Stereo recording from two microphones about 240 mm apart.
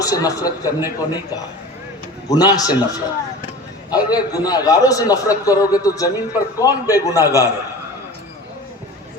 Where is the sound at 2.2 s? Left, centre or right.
Centre.